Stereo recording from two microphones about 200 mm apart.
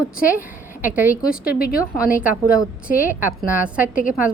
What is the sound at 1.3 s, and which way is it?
Speech, 45° left (ahead or behind).